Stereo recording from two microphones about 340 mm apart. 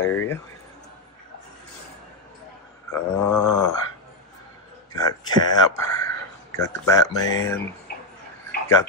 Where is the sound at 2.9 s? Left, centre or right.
Centre.